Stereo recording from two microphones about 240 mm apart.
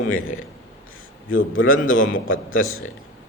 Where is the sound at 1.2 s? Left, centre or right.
Left.